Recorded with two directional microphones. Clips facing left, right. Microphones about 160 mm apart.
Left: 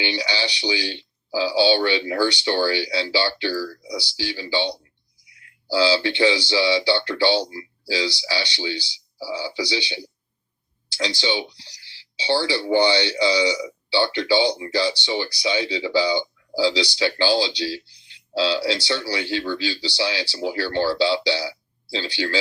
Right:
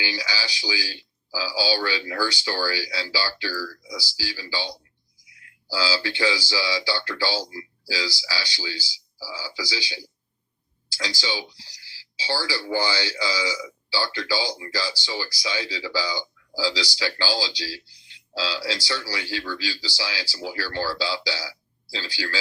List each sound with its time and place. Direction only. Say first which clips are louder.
0.0 s speech: left 6 dB; 25° left (ahead or behind)
3.9 s speech: left 8 dB; 65° left (ahead or behind)
4.2 s speech: left 8 dB; 25° left (ahead or behind)
11.2 s speech: left 5 dB; 25° left (ahead or behind)
18.1 s a sound: left 8 dB; 25° left (ahead or behind)
18.9 s speech: left 6 dB; 25° left (ahead or behind)